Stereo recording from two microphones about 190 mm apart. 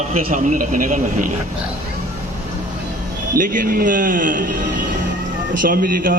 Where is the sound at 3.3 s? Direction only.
45° right (ahead or behind).